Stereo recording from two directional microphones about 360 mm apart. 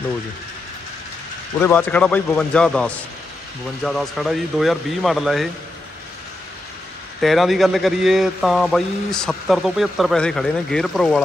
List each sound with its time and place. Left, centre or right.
1.6 s a man's voice: centre
7.2 s a man's voice: centre